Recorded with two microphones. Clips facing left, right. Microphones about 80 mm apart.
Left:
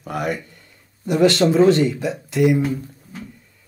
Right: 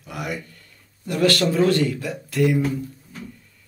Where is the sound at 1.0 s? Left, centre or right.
Left.